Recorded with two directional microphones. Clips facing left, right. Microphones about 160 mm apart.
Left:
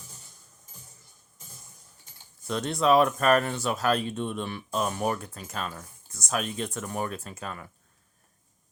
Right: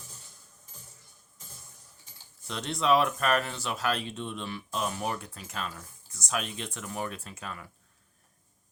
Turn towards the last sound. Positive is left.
turn(degrees=40)  # may be behind; listen again after turning